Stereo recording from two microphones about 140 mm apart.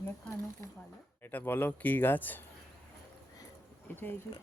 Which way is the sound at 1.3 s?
15° left (ahead or behind).